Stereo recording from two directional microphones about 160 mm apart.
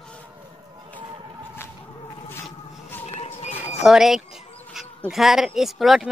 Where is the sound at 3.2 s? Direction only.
40° left (ahead or behind).